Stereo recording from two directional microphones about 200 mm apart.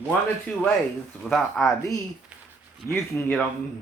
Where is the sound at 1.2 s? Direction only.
Centre (ahead or behind).